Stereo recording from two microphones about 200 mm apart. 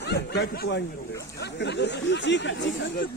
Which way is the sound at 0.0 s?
55° left (ahead or behind).